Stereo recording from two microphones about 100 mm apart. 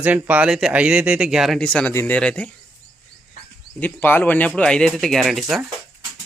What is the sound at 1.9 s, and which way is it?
Speech, 25° left (ahead or behind).